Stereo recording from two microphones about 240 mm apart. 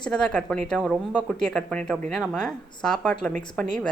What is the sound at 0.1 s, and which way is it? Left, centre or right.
Speech, centre.